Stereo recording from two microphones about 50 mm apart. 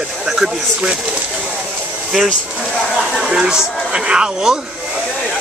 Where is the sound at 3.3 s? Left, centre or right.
Centre.